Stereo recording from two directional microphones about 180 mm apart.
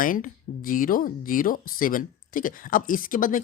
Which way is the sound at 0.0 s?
50° left (ahead or behind).